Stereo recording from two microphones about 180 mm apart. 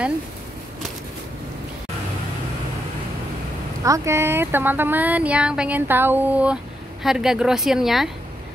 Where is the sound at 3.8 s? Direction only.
15° right (ahead or behind).